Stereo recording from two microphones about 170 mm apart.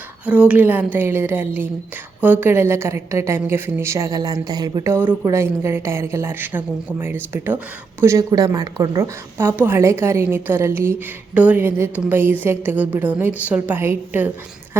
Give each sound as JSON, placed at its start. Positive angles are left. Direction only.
{"t": 0.3, "sound": "a woman's voice", "side_deg": -5}